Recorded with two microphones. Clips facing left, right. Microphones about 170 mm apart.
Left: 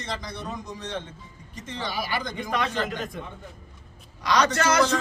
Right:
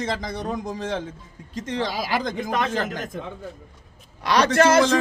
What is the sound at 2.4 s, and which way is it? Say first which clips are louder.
Speech: right 3 dB; 45° right (ahead or behind).